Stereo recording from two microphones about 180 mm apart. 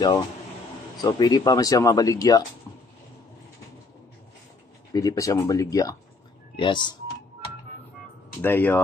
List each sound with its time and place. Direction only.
1.0 s speech: 25° left (ahead or behind)
4.9 s speech: 20° left (ahead or behind)
8.4 s speech: 10° left (ahead or behind)